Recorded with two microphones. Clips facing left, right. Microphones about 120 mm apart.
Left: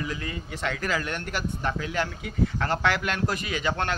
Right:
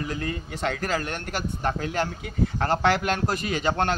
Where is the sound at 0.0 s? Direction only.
45° right (ahead or behind).